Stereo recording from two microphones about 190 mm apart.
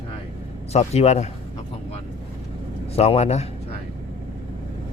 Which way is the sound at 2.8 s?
30° left (ahead or behind).